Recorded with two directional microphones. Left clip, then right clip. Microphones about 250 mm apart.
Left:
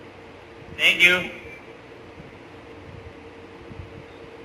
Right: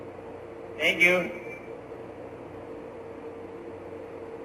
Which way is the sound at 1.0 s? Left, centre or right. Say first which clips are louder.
Left 3 dB; centre.